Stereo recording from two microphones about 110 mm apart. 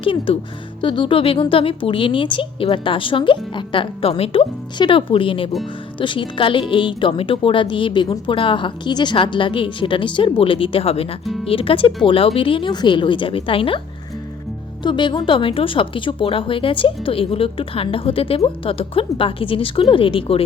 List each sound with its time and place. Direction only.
0.0 s a woman's voice: 50° left (ahead or behind)
14.8 s speech: 45° left (ahead or behind)